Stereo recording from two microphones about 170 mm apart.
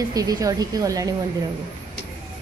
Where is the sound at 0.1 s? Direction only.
20° right (ahead or behind).